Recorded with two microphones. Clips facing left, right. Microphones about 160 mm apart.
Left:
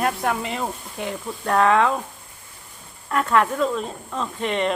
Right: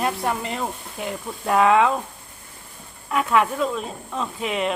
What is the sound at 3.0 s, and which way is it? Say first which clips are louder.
Speech: even; 5° right (ahead or behind).